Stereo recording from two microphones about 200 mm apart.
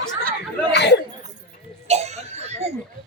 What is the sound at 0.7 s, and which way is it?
Speech, 60° left (ahead or behind).